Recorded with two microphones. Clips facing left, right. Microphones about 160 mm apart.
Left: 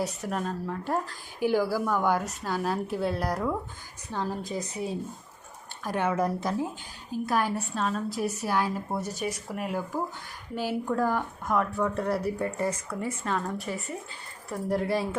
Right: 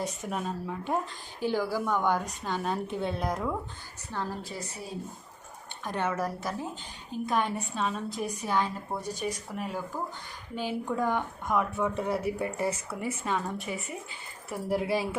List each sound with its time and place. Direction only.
0.0 s a woman's voice: centre (ahead or behind)
1.4 s a woman's voice: 10° left (ahead or behind)
4.1 s a woman's voice: 15° left (ahead or behind)
7.1 s a woman's voice: 5° left (ahead or behind)